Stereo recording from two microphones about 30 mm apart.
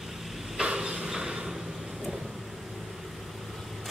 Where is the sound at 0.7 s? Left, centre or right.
Right.